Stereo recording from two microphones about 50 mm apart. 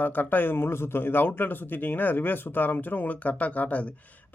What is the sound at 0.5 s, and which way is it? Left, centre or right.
Speech, left.